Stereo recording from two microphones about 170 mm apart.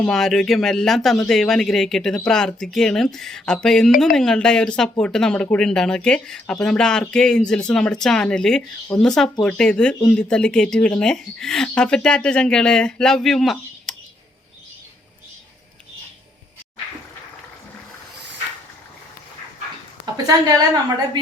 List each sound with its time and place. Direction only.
0.0 s speech: centre (ahead or behind)
20.2 s a woman's voice: 20° right (ahead or behind)